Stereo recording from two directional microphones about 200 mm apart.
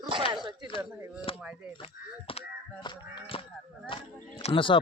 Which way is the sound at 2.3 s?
25° left (ahead or behind).